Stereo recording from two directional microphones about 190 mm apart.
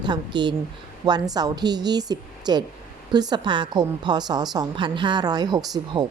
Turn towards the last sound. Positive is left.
turn(degrees=-20)  # may be behind; listen again after turning